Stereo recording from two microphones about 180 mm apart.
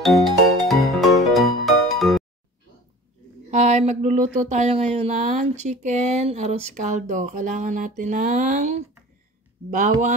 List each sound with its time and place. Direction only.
0.0 s music: centre (ahead or behind)
3.4 s speech: 40° right (ahead or behind)